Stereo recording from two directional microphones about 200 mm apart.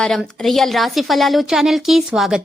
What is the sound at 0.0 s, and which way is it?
A woman's voice, centre (ahead or behind).